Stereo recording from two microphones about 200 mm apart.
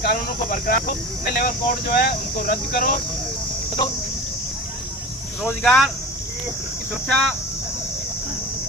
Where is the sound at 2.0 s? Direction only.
50° left (ahead or behind).